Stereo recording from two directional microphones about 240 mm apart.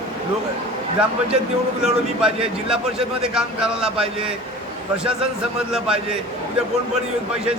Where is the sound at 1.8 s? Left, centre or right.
Centre.